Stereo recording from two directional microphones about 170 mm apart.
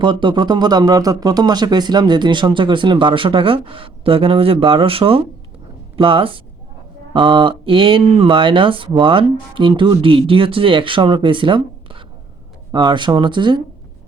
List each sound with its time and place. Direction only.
0.0 s speech: 30° right (ahead or behind)